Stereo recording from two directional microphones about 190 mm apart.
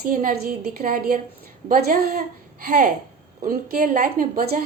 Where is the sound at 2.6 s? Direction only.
45° right (ahead or behind).